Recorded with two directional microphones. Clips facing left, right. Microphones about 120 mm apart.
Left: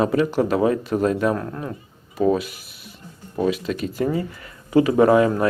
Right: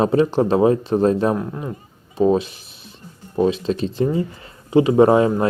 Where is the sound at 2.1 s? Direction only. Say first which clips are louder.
Right 3 dB; 25° right (ahead or behind).